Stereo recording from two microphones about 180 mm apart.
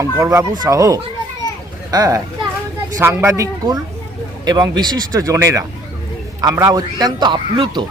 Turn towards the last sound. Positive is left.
turn(degrees=-25)  # may be behind; listen again after turning